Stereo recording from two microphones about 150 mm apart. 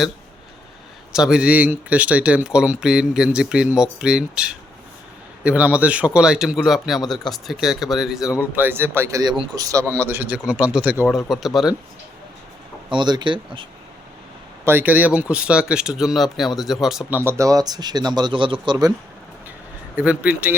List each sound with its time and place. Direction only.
1.1 s speech: 5° right (ahead or behind)
8.4 s speech: 15° right (ahead or behind)
12.9 s speech: 30° right (ahead or behind)
14.6 s speech: 15° right (ahead or behind)
17.2 s speech: 15° right (ahead or behind)
20.0 s speech: 10° right (ahead or behind)